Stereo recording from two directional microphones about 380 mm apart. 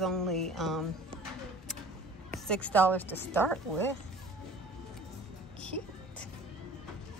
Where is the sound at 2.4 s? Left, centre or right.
Centre.